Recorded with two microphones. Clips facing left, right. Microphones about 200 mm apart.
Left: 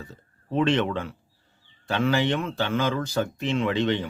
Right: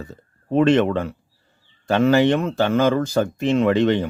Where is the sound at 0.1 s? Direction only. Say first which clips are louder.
Right 8 dB; 45° right (ahead or behind).